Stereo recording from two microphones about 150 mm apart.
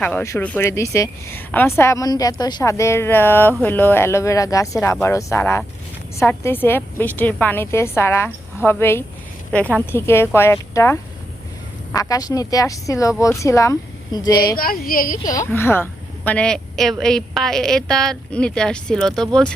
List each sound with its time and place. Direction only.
0.2 s speech: 15° left (ahead or behind)
11.9 s speech: 25° left (ahead or behind)
14.5 s speech: 75° left (ahead or behind)
15.2 s speech: 25° left (ahead or behind); by 19.5 s 5° left (ahead or behind)